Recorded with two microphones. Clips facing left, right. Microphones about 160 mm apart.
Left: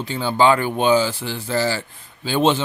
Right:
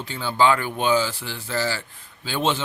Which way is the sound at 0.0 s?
25° left (ahead or behind).